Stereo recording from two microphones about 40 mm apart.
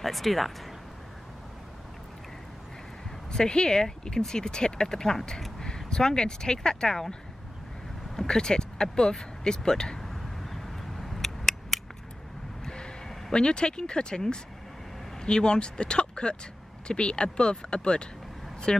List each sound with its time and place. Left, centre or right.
0.0 s speech: centre
3.3 s speech: left
8.2 s speech: centre
9.9 s a sound: centre
12.6 s a sound: left
13.3 s speech: left